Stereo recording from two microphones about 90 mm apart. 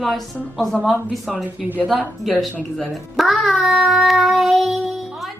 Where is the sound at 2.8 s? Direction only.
Centre (ahead or behind).